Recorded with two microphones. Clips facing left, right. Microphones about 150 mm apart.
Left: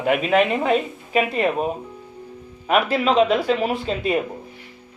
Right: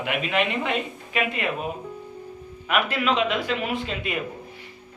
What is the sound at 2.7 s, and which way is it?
Speech, 35° left (ahead or behind).